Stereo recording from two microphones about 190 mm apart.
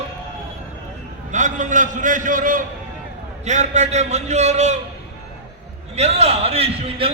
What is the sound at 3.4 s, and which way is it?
A man's voice, 40° right (ahead or behind).